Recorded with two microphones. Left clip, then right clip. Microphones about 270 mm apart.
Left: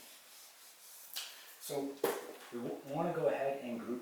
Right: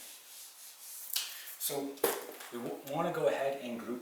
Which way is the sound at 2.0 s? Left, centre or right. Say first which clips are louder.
Right 3 dB; centre.